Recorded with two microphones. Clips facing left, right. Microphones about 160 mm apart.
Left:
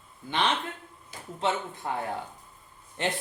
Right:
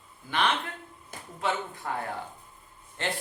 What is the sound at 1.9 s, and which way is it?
Speech, 20° left (ahead or behind).